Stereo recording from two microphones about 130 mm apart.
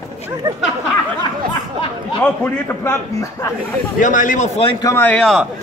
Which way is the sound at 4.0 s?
85° left.